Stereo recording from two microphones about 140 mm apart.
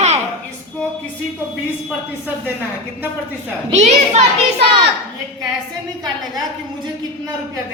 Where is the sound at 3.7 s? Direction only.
55° right (ahead or behind).